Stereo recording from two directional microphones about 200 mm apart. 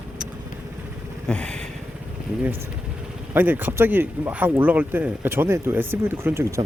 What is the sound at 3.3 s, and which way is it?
Speech, 10° right (ahead or behind).